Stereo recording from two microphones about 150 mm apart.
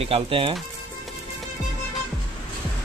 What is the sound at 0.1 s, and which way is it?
Speech, 40° right (ahead or behind).